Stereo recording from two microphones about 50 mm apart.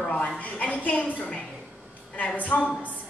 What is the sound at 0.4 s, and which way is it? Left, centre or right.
A woman's voice, left.